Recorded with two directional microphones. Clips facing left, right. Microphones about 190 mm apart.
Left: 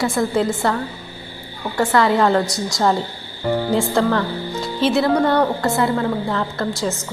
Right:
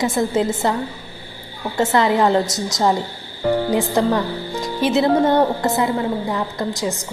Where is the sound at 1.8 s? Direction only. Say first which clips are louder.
Even; 20° right (ahead or behind).